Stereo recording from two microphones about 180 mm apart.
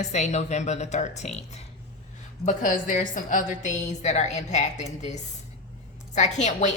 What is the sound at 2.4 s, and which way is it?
A woman's voice, 45° left (ahead or behind).